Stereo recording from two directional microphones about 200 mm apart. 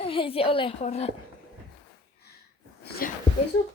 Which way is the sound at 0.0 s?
30° left (ahead or behind).